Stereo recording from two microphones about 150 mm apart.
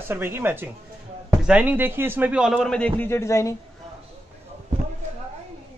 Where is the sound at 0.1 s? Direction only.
15° right (ahead or behind); by 3.5 s 20° left (ahead or behind).